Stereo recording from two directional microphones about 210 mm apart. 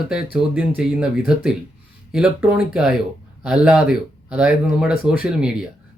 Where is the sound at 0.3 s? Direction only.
5° right (ahead or behind).